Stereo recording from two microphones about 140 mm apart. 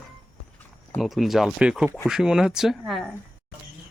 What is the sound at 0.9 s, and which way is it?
Speech, centre (ahead or behind).